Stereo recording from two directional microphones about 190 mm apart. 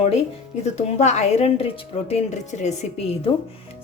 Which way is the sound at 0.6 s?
35° left (ahead or behind).